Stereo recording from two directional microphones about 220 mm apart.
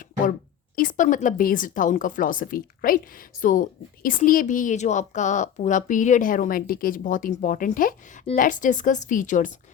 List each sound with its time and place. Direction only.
0.8 s speech: 35° left (ahead or behind)